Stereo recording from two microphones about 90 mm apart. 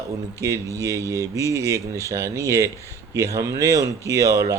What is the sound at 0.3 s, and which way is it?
Speech, 35° right (ahead or behind).